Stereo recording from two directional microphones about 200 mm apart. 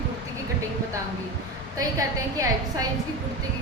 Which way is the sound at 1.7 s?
15° right (ahead or behind).